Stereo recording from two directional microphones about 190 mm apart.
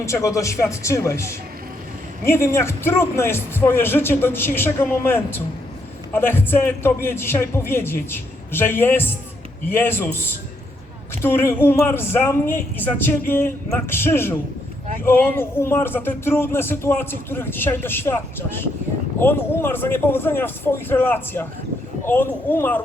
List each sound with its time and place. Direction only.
0.0 s speech: 15° left (ahead or behind)